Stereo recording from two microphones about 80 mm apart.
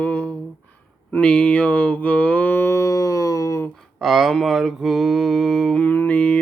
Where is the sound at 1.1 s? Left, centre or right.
Centre; by 3.6 s left.